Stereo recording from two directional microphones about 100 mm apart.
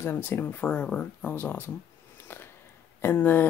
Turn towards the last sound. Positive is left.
turn(degrees=20)  # may be behind; listen again after turning